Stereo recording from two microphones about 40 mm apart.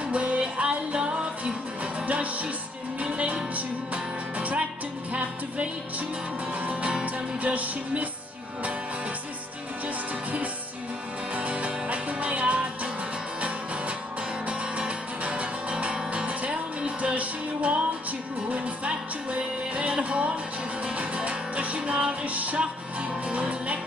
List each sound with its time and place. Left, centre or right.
0.1 s music: right
3.0 s music: right
11.3 s music: right
14.8 s music: right